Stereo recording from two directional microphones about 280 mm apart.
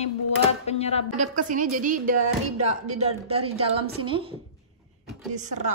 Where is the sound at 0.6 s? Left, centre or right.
Left.